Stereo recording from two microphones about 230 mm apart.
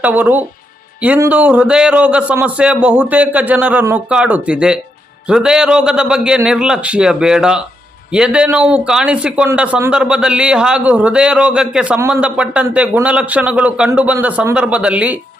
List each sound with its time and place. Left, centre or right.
0.0 s speech: centre